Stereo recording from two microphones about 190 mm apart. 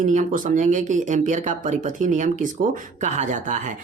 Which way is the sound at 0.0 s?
45° right (ahead or behind).